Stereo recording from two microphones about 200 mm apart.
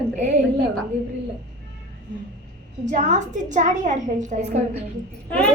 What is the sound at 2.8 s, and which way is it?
A woman's voice, 40° right (ahead or behind).